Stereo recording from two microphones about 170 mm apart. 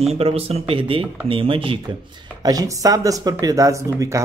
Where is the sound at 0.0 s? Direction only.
40° right (ahead or behind).